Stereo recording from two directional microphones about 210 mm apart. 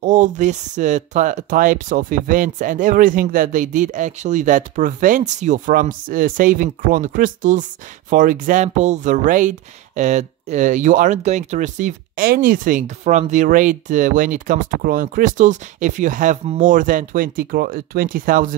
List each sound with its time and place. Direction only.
0.0 s speech: 35° right (ahead or behind)